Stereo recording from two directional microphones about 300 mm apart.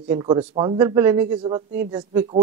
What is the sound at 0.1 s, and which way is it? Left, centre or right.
A man's voice, centre.